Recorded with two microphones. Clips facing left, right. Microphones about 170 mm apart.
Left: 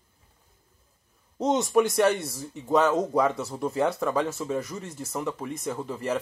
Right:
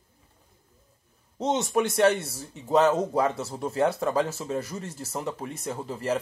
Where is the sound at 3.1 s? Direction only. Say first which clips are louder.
Left 1 dB; 30° right (ahead or behind).